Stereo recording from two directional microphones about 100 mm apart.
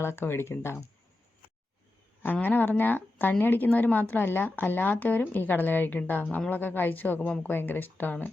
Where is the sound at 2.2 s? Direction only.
20° left (ahead or behind).